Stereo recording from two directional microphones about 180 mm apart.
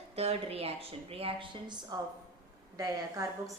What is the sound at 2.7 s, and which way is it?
Speech, 20° right (ahead or behind).